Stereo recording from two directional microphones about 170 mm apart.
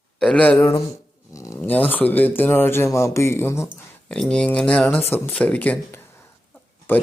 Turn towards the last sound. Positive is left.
turn(degrees=10)  # may be behind; listen again after turning